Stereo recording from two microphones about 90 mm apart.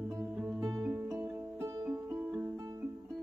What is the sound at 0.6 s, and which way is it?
Music, 35° right (ahead or behind).